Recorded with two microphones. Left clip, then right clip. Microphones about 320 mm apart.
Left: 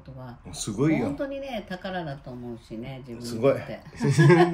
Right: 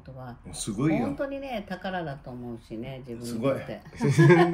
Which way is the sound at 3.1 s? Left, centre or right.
Centre.